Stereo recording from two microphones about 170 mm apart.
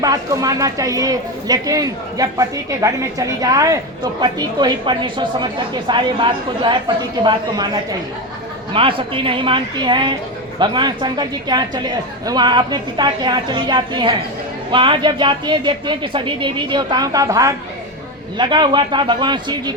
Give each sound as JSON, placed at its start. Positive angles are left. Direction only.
{"t": 0.0, "sound": "speech", "side_deg": -20}
{"t": 8.7, "sound": "speech", "side_deg": -30}